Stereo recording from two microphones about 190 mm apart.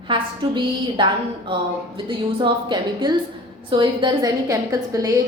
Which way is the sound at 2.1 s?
25° right (ahead or behind).